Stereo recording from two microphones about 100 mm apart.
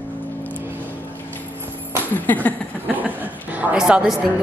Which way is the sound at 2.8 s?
15° right (ahead or behind).